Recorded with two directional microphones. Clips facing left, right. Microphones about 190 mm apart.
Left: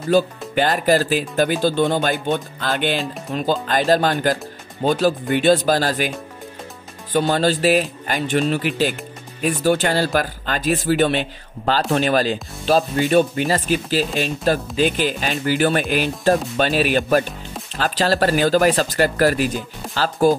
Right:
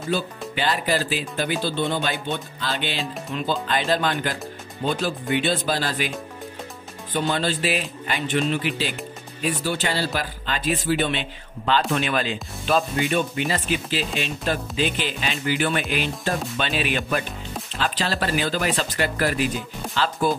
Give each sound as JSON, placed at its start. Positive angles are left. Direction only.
{"t": 0.6, "sound": "speech", "side_deg": 45}